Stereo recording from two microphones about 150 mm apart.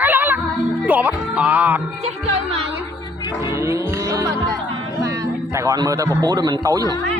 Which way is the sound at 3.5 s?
20° right (ahead or behind).